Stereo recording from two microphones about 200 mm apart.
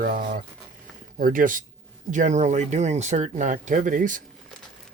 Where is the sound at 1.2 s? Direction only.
45° right (ahead or behind).